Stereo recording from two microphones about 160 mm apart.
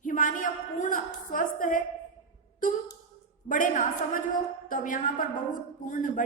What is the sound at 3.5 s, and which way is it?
A woman's voice, 55° left (ahead or behind).